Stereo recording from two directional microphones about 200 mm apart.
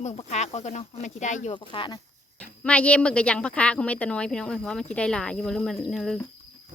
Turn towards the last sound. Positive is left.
turn(degrees=0)  # may be behind; listen again after turning